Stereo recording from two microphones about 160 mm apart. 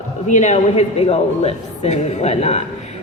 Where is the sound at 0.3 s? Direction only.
50° left (ahead or behind).